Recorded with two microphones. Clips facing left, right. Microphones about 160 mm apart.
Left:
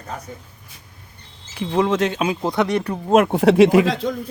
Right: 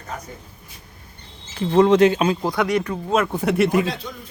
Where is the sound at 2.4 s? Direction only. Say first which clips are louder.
Left 1 dB; 25° left (ahead or behind).